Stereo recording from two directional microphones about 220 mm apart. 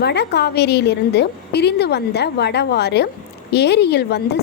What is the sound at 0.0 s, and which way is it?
A woman's voice, 50° left (ahead or behind).